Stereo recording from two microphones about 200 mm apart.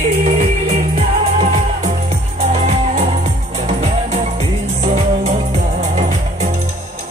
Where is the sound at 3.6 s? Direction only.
30° right (ahead or behind).